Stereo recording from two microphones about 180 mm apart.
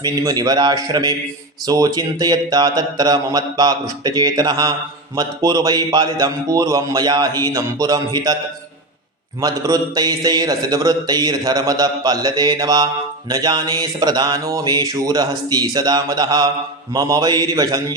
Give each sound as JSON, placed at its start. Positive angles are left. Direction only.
{"t": 0.0, "sound": "a man's voice", "side_deg": -20}
{"t": 9.4, "sound": "a man's voice", "side_deg": -20}